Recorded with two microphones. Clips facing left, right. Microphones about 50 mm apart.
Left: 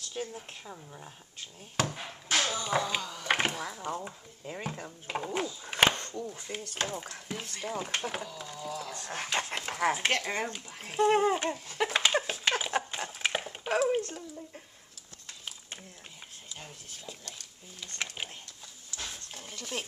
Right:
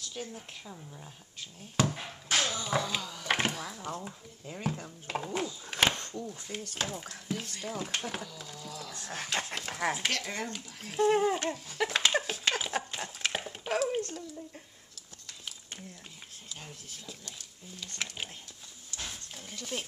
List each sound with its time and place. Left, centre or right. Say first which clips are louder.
0.1 s speech: left 6 dB; centre
1.8 s speech: right 2 dB; centre
10.0 s speech: left 4 dB; left
12.1 s dog: left 1 dB; centre
16.5 s speech: even; centre
19.5 s speech: even; centre